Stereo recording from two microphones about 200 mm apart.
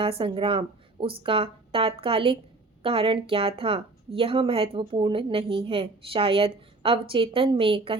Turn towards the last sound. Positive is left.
turn(degrees=-25)  # may be behind; listen again after turning